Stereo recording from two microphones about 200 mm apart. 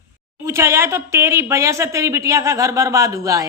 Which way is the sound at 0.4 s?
15° right (ahead or behind).